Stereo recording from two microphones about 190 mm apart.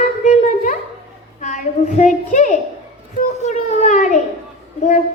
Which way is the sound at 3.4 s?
40° left (ahead or behind).